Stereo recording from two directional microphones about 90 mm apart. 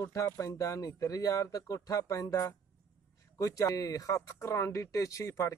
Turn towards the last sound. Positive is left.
turn(degrees=35)  # may be behind; listen again after turning